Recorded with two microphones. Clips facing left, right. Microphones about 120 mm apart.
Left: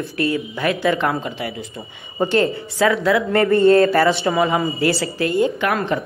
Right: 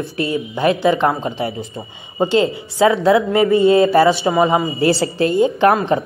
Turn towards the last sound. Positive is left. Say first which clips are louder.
# right 6 dB
turn(degrees=-25)  # may be behind; listen again after turning